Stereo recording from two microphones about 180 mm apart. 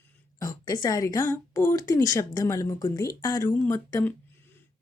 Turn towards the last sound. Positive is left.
turn(degrees=10)  # may be behind; listen again after turning